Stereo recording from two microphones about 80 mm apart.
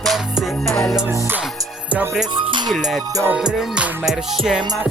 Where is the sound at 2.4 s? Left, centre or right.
Right.